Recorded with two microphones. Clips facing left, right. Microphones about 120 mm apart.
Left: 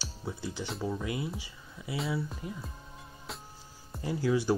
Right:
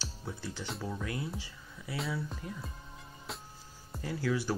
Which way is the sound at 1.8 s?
20° left (ahead or behind).